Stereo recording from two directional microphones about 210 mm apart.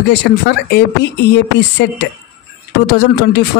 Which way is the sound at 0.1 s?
55° left (ahead or behind).